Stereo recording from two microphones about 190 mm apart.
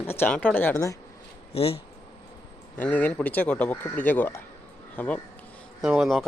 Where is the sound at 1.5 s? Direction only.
30° left (ahead or behind).